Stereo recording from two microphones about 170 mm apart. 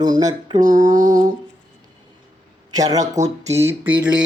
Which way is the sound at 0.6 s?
45° right (ahead or behind).